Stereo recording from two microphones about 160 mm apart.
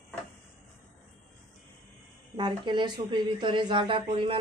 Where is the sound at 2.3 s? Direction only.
30° right (ahead or behind).